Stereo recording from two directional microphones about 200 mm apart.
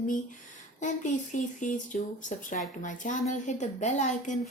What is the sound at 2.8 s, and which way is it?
A woman's voice, 40° left (ahead or behind).